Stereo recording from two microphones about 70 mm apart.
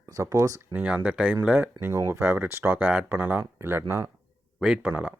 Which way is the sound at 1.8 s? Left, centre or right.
Right.